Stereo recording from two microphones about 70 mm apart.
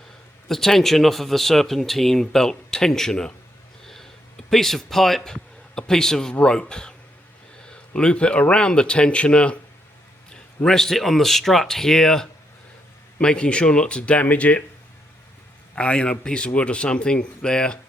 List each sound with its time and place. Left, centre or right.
0.4 s speech: centre; by 14.6 s left
15.7 s speech: centre